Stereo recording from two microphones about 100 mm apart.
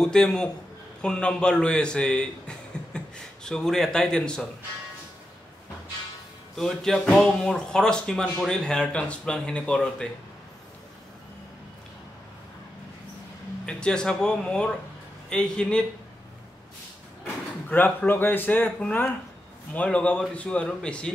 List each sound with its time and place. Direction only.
0.0 s a man's voice: 5° left (ahead or behind)
6.5 s speech: 5° left (ahead or behind)
13.7 s speech: 10° left (ahead or behind)
17.6 s speech: 20° left (ahead or behind)